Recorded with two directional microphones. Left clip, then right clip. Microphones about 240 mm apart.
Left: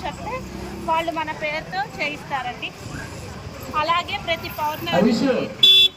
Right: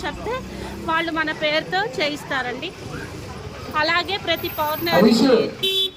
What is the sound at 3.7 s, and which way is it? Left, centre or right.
Speech, centre.